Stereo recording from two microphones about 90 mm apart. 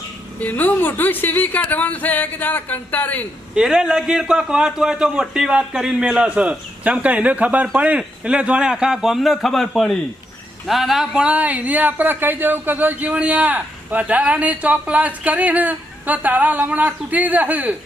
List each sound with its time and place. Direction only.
0.3 s speech: 20° left (ahead or behind)
3.5 s speech: 10° right (ahead or behind)